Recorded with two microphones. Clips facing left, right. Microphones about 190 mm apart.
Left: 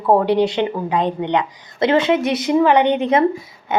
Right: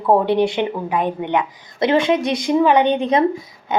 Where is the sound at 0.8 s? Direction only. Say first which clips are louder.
Left 1 dB; 20° left (ahead or behind).